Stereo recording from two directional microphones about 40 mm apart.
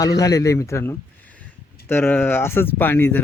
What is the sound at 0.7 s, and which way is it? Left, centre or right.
Speech, left.